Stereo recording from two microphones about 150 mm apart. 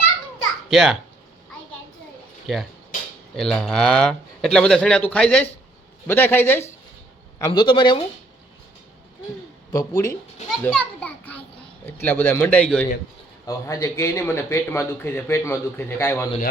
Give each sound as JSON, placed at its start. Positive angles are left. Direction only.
{"t": 0.7, "sound": "speech", "side_deg": 0}
{"t": 2.5, "sound": "a man's voice", "side_deg": 0}
{"t": 7.3, "sound": "speech", "side_deg": 25}
{"t": 9.7, "sound": "speech", "side_deg": 20}
{"t": 10.6, "sound": "children playing", "side_deg": 5}
{"t": 11.9, "sound": "a man's voice", "side_deg": 15}
{"t": 13.4, "sound": "a man's voice", "side_deg": 25}